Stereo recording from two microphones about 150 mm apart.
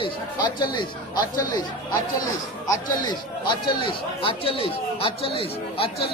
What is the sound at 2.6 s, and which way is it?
Speech, 30° left (ahead or behind).